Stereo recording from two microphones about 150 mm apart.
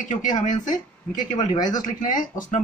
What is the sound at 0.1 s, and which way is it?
Speech, 55° left (ahead or behind).